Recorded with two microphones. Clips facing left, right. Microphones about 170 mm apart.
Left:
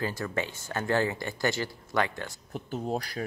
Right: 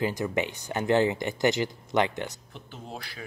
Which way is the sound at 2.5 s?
45° left (ahead or behind).